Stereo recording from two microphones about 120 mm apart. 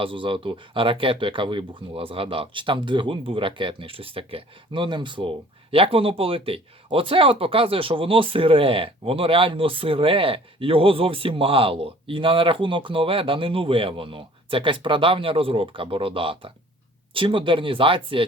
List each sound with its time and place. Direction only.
0.0 s speech: 45° right (ahead or behind)